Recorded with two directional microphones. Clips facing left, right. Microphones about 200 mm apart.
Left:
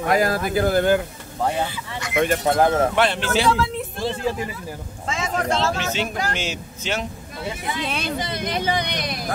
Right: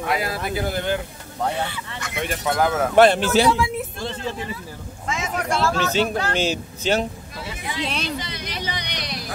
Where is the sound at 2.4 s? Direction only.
30° left (ahead or behind).